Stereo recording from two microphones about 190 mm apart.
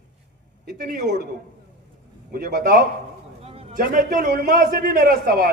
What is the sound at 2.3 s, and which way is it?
Speech, 50° right (ahead or behind).